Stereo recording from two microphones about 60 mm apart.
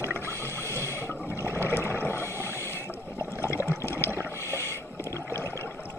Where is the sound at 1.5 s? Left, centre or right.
Left.